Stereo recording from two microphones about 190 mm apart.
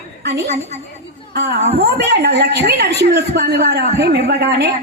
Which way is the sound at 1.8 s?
60° right (ahead or behind).